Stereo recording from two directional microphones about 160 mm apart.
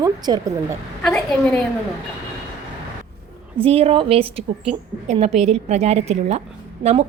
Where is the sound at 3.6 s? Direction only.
35° right (ahead or behind).